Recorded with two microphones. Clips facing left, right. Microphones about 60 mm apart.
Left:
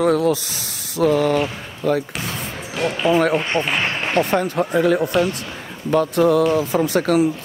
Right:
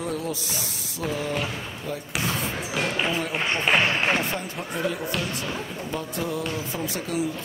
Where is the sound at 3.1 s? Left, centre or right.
Left.